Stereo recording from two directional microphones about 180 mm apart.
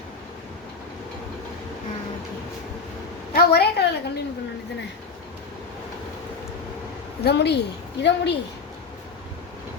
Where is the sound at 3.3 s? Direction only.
60° left (ahead or behind).